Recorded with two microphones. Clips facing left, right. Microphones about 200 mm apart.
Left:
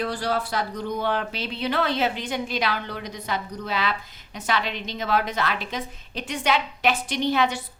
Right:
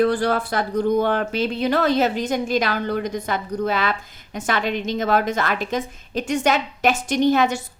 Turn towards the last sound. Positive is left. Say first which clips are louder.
# right 6 dB
turn(degrees=-45)  # may be behind; listen again after turning